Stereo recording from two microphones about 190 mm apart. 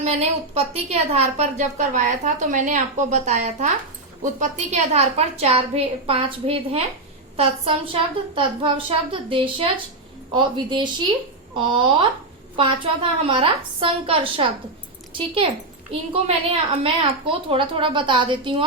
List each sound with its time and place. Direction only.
0.0 s a woman's voice: 35° right (ahead or behind)
15.9 s a woman's voice: 30° right (ahead or behind)